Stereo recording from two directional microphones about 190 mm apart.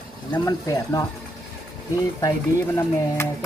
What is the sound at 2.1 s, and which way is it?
Speech, 15° left (ahead or behind).